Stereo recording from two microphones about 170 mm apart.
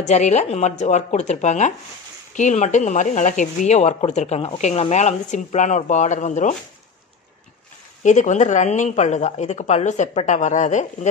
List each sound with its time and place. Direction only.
0.0 s speech: 45° left (ahead or behind)
8.0 s speech: 45° left (ahead or behind)